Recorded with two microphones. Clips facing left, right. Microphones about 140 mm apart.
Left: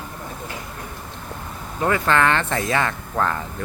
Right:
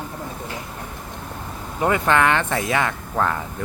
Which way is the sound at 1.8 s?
15° right (ahead or behind).